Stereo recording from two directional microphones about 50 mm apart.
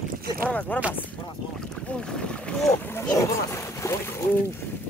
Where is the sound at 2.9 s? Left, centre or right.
Left.